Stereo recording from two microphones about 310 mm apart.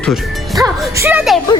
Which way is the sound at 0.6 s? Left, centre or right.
Centre.